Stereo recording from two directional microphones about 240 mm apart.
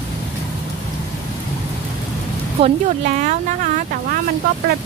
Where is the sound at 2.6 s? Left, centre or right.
Right.